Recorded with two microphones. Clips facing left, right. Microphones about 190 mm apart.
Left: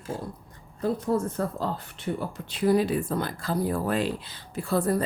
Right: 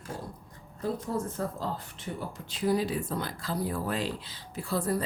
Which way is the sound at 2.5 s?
65° left (ahead or behind).